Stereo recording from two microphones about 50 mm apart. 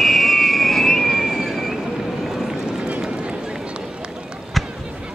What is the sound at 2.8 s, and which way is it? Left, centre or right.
Run, right.